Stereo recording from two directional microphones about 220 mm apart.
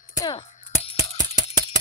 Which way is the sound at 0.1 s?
20° left (ahead or behind).